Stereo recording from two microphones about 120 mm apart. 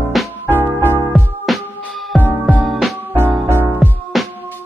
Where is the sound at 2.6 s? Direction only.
Centre (ahead or behind).